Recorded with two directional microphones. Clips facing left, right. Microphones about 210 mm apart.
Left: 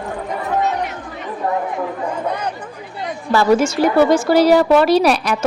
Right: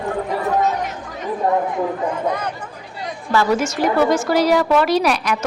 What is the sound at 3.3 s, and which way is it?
A woman's voice, 30° left (ahead or behind).